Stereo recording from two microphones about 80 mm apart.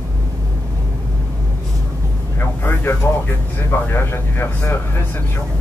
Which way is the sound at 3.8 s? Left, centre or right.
Left.